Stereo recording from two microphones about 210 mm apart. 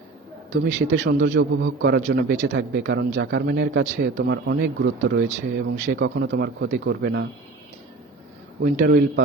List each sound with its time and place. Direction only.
1.0 s a man's voice: 60° right (ahead or behind)
8.6 s speech: 40° right (ahead or behind)